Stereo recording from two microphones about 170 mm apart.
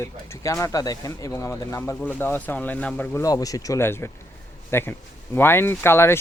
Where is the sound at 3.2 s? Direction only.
20° left (ahead or behind).